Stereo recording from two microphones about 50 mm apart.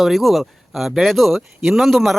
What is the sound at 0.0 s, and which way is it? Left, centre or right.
A man's voice, centre.